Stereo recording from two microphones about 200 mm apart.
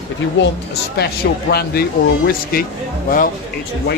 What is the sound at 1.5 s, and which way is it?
Speech, 50° left (ahead or behind).